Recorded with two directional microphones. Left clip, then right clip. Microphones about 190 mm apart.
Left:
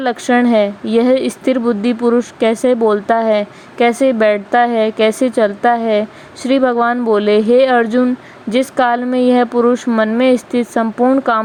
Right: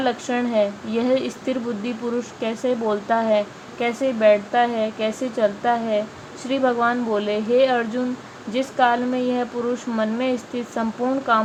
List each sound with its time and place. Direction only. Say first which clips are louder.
0.0 s speech: left 9 dB; 45° left (ahead or behind)